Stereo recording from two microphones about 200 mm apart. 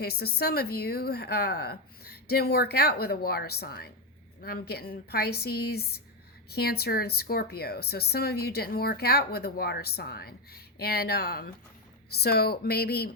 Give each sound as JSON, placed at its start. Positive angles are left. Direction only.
{"t": 0.0, "sound": "a woman's voice", "side_deg": 50}